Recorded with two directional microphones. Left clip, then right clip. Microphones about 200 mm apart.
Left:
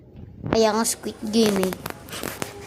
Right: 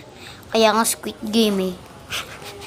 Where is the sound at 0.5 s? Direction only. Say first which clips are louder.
Right 3 dB; 5° right (ahead or behind).